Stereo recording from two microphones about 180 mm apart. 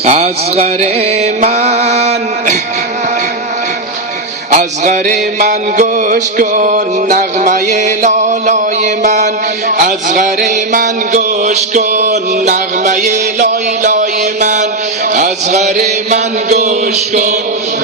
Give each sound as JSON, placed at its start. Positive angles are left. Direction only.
{"t": 0.0, "sound": "mantra", "side_deg": -35}
{"t": 4.5, "sound": "music", "side_deg": -45}
{"t": 15.1, "sound": "mantra", "side_deg": -40}